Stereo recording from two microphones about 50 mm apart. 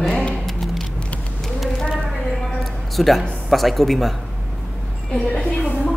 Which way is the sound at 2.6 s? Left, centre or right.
Centre.